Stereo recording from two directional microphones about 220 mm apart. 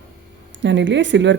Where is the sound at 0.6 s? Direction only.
55° right (ahead or behind).